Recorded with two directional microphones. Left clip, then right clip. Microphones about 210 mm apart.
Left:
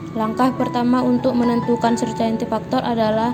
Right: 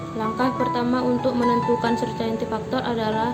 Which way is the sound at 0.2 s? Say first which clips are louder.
Left 4 dB; 30° left (ahead or behind).